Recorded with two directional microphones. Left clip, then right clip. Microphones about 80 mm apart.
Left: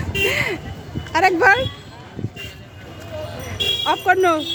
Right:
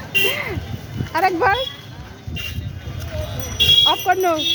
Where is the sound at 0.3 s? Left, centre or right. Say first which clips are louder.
Left 2 dB; left.